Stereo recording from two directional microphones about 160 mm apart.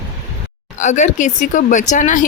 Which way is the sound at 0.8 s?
50° left (ahead or behind).